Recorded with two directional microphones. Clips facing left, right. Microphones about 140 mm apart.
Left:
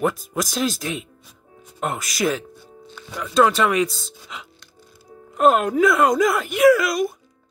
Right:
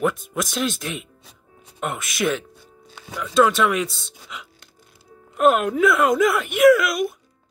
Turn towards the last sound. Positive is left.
turn(degrees=0)  # may be behind; listen again after turning